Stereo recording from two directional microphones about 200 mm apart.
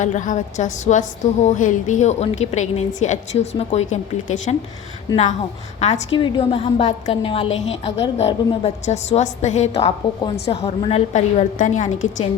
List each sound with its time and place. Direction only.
0.0 s a woman's voice: 40° left (ahead or behind)
6.1 s a woman's voice: 25° left (ahead or behind)